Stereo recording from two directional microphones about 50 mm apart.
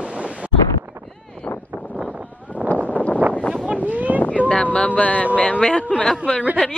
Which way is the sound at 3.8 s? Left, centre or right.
Right.